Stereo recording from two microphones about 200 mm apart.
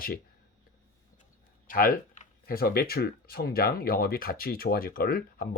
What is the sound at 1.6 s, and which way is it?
Speech, 45° left (ahead or behind).